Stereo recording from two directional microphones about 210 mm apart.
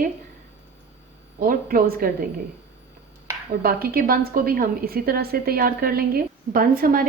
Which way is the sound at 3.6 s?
45° right (ahead or behind).